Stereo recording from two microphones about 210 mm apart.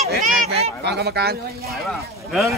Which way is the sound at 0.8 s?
50° right (ahead or behind).